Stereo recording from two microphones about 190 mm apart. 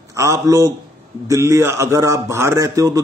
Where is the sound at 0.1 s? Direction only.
15° right (ahead or behind).